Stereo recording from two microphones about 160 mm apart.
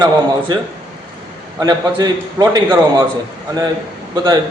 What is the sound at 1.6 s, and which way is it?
A man's voice, 25° right (ahead or behind).